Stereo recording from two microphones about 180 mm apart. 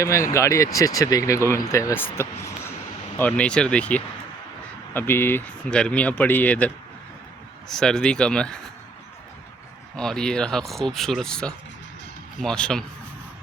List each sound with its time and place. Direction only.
0.0 s speech: 15° left (ahead or behind)
7.7 s speech: 5° left (ahead or behind)
9.9 s speech: 5° left (ahead or behind)